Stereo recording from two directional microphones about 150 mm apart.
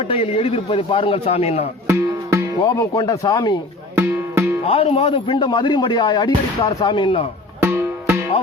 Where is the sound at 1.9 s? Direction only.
20° right (ahead or behind).